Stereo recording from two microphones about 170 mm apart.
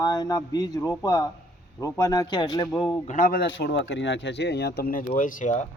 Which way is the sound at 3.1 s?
50° left (ahead or behind).